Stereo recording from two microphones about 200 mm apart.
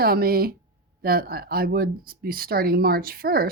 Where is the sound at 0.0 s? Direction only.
50° right (ahead or behind).